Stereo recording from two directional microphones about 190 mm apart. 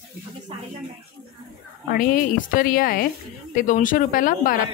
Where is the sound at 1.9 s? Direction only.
45° left (ahead or behind).